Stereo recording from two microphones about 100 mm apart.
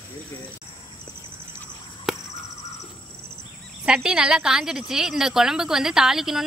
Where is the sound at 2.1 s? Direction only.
Centre (ahead or behind).